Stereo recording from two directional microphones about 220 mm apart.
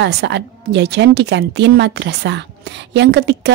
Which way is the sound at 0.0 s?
50° right (ahead or behind).